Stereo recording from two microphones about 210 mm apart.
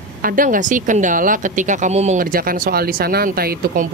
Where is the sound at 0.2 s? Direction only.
40° right (ahead or behind).